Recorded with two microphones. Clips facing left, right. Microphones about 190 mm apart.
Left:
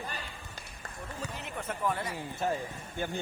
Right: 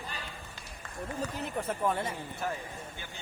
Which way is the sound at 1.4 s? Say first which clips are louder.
Right 2 dB; 30° right (ahead or behind).